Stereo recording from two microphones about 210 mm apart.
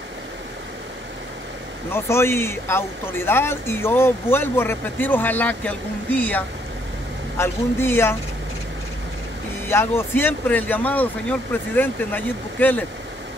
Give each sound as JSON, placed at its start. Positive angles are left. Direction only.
{"t": 1.9, "sound": "speech", "side_deg": 10}
{"t": 9.7, "sound": "speech", "side_deg": 10}